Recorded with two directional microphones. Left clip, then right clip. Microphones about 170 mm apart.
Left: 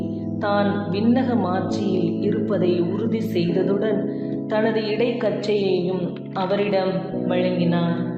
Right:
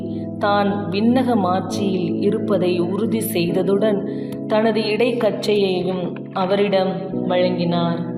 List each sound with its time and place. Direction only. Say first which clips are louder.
0.4 s speech: right 3 dB; 55° right (ahead or behind)